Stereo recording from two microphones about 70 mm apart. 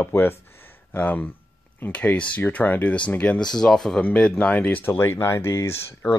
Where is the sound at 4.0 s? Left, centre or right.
Centre.